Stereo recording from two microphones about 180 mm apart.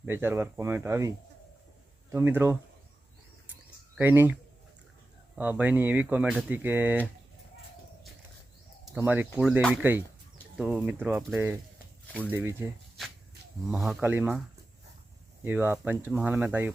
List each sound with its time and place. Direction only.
0.0 s speech: 10° right (ahead or behind)
3.9 s speech: 10° right (ahead or behind)
5.4 s speech: 10° right (ahead or behind)
9.0 s speech: 10° right (ahead or behind)
9.6 s speech: 5° left (ahead or behind)
10.6 s speech: 10° right (ahead or behind)
13.7 s speech: centre (ahead or behind)
15.4 s speech: 10° right (ahead or behind)